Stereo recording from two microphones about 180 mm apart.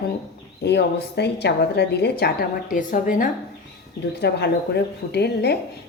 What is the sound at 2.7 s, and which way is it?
Speech, 45° left (ahead or behind).